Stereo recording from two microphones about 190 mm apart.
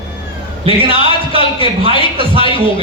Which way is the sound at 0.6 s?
30° right (ahead or behind).